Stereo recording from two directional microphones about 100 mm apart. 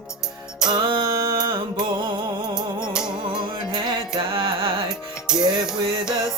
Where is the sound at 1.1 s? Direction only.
40° right (ahead or behind).